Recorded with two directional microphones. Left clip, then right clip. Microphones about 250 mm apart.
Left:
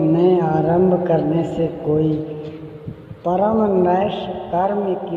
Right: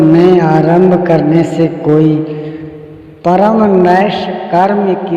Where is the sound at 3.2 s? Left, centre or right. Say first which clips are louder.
Right 8 dB; right.